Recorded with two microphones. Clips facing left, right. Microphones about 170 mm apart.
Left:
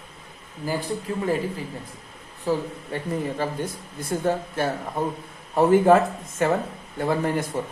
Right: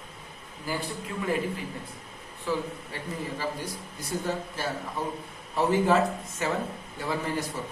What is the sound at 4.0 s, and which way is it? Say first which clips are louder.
A man's voice: left 7 dB; 55° left (ahead or behind).